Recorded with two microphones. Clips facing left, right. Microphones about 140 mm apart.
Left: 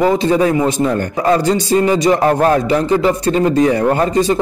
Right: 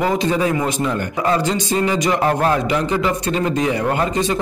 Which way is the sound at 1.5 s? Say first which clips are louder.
Left 6 dB; 40° left (ahead or behind).